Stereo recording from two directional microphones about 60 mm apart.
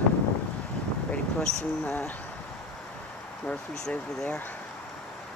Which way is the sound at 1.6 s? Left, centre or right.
Left.